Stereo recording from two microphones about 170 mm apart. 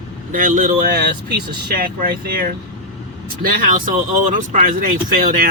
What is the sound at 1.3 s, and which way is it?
Speech, 70° right (ahead or behind).